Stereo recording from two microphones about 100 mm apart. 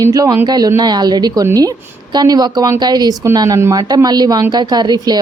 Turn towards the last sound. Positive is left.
turn(degrees=-45)  # may be behind; listen again after turning